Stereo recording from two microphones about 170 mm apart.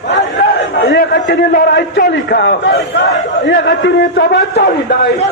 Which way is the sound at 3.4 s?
90° left.